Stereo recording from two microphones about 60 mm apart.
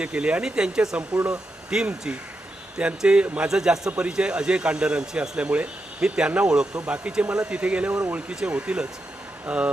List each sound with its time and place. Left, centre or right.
0.0 s speech: centre